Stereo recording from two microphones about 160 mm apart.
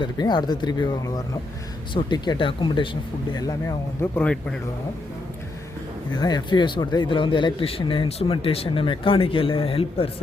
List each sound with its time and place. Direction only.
0.0 s speech: 25° left (ahead or behind); by 4.4 s 10° left (ahead or behind)
6.1 s speech: 25° left (ahead or behind)